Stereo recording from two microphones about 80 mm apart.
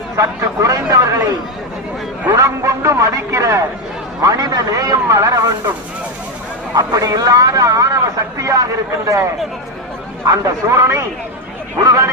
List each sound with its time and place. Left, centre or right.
0.2 s a man's voice: right
2.3 s a man's voice: right
4.2 s a man's voice: right
6.7 s a man's voice: right
10.2 s a man's voice: right